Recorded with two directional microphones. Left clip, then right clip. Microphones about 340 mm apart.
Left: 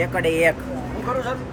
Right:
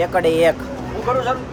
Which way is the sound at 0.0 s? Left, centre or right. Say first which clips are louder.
Right 4 dB; centre.